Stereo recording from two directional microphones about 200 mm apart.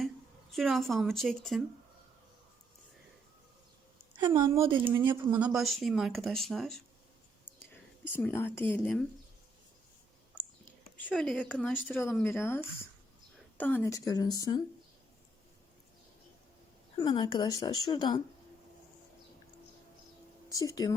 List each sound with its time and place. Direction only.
0.5 s speech: centre (ahead or behind)
4.2 s speech: 15° right (ahead or behind)
5.3 s speech: 5° right (ahead or behind)
8.1 s speech: 10° left (ahead or behind)
10.9 s speech: 5° left (ahead or behind)
17.0 s speech: 20° left (ahead or behind)
20.5 s speech: 15° left (ahead or behind)